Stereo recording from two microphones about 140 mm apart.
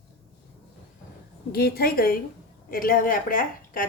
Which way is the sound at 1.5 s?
90° left.